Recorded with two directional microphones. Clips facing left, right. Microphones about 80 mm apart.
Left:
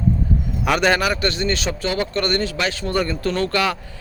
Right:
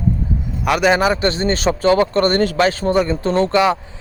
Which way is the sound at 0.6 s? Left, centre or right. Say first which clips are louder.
Right 2 dB; centre.